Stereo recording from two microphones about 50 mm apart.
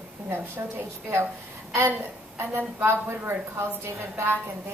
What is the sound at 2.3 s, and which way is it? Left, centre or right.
A woman's voice, right.